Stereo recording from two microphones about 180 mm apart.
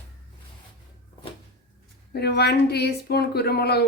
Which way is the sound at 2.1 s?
65° left (ahead or behind).